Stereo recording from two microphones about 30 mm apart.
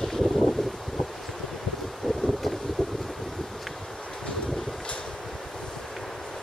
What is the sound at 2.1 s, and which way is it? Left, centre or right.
Wind, left.